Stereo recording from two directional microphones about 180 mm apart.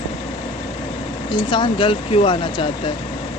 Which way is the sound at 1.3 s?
25° left (ahead or behind).